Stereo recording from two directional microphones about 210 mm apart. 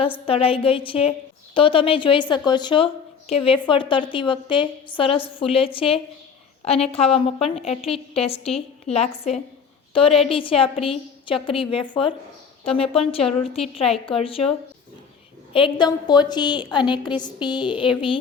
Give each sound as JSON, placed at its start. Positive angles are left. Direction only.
{"t": 0.3, "sound": "a woman's voice", "side_deg": 25}
{"t": 15.5, "sound": "a woman's voice", "side_deg": 25}